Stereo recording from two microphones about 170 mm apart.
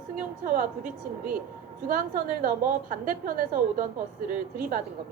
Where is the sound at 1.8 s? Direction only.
55° right (ahead or behind).